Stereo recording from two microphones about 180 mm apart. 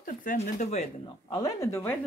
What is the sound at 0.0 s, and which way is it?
Speech, 50° left (ahead or behind).